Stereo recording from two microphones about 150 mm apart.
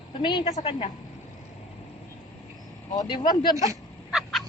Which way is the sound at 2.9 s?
25° left (ahead or behind).